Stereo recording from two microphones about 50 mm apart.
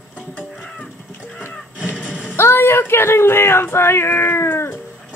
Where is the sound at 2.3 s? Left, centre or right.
Left.